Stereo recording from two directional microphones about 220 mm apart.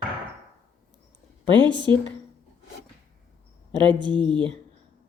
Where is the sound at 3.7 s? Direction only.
20° right (ahead or behind).